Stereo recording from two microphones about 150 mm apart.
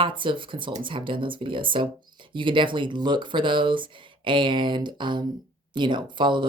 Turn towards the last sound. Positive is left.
turn(degrees=-30)  # may be behind; listen again after turning